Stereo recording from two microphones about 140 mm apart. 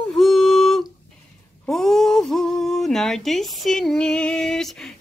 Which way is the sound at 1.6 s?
Centre (ahead or behind).